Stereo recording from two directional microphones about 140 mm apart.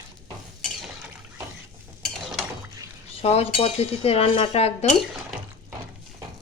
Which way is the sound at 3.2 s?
45° left (ahead or behind).